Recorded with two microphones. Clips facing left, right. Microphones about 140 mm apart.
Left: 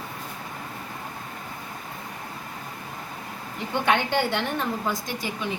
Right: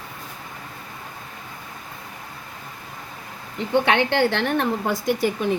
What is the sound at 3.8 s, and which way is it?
A woman's voice, 65° right (ahead or behind).